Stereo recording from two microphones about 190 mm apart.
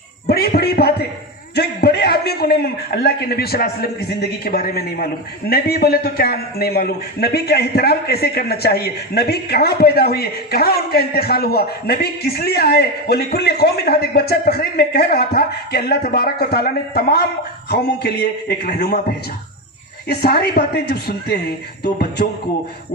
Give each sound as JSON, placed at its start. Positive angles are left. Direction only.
{"t": 0.3, "sound": "music", "side_deg": 55}
{"t": 1.5, "sound": "a man's voice", "side_deg": 60}
{"t": 20.1, "sound": "a man's voice", "side_deg": 60}